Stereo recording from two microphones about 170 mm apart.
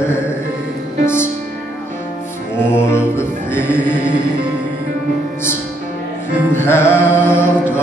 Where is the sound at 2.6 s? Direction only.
15° left (ahead or behind).